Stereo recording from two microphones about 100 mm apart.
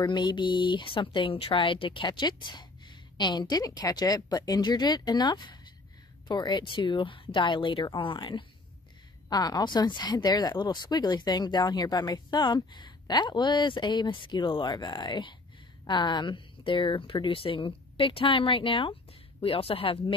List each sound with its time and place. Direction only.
0.0 s speech: 50° left (ahead or behind)
9.3 s speech: 40° left (ahead or behind); by 18.9 s 60° left (ahead or behind)
19.4 s speech: 70° left (ahead or behind)